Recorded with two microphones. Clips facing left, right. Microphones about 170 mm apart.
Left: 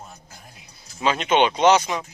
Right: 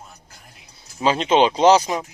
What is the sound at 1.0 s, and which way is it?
Speech, 30° right (ahead or behind).